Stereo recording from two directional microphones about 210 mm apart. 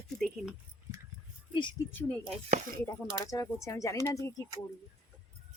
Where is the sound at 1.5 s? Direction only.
20° left (ahead or behind).